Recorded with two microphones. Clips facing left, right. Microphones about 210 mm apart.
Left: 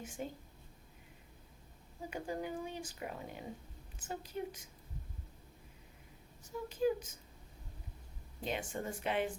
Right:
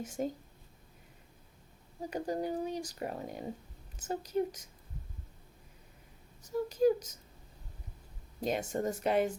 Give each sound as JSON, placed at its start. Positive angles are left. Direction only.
{"t": 0.0, "sound": "speech", "side_deg": -40}
{"t": 2.0, "sound": "speech", "side_deg": -40}
{"t": 6.4, "sound": "speech", "side_deg": -40}
{"t": 8.4, "sound": "speech", "side_deg": -40}